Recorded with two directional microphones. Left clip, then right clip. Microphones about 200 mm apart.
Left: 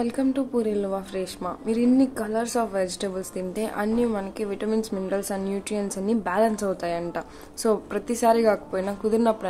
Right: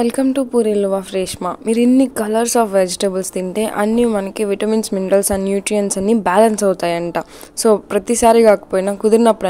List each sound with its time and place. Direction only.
0.0 s a woman's voice: 45° right (ahead or behind)